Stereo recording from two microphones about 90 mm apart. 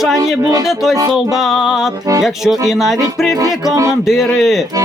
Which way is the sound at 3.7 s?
40° right (ahead or behind).